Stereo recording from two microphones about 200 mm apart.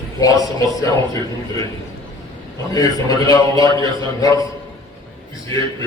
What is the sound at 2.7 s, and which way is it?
Speech, 20° left (ahead or behind).